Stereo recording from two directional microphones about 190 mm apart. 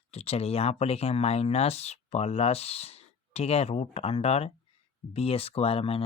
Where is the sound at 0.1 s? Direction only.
35° left (ahead or behind).